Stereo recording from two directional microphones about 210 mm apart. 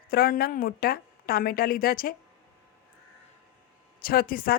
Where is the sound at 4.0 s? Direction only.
45° left (ahead or behind).